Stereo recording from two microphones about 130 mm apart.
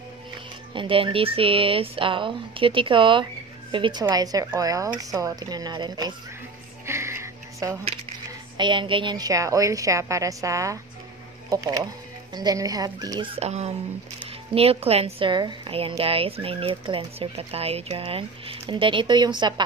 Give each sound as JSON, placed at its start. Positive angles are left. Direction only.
{"t": 0.7, "sound": "speech", "side_deg": -40}
{"t": 6.9, "sound": "music", "side_deg": -20}
{"t": 8.5, "sound": "a woman's voice", "side_deg": -35}
{"t": 13.3, "sound": "speech", "side_deg": -55}